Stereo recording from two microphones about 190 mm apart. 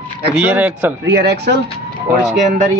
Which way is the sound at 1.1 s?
60° right (ahead or behind).